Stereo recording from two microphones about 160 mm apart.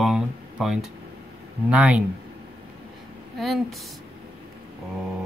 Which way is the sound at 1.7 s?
5° right (ahead or behind).